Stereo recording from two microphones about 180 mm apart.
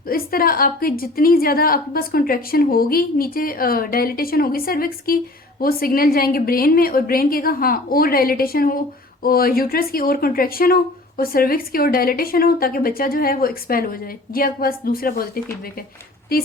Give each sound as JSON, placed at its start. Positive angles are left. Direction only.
{"t": 0.1, "sound": "a woman's voice", "side_deg": 55}
{"t": 16.3, "sound": "speech", "side_deg": 55}